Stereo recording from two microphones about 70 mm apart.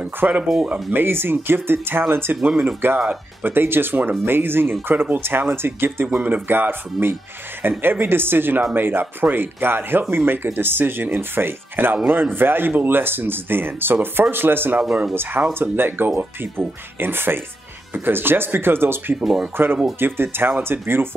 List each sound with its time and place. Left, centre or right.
0.0 s speech: right
0.4 s speech: centre
0.9 s speech: right